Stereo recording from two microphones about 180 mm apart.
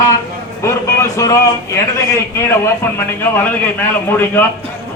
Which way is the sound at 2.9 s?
10° left (ahead or behind).